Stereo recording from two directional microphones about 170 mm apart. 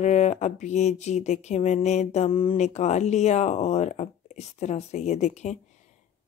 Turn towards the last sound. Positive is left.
turn(degrees=45)  # may be behind; listen again after turning